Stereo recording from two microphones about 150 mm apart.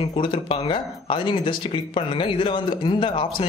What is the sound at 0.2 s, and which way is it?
Speech, 35° left (ahead or behind).